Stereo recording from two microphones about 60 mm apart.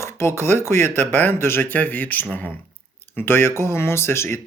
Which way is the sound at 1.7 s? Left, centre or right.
Left.